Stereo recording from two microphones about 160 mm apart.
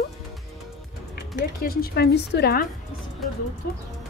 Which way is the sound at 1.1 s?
65° left (ahead or behind).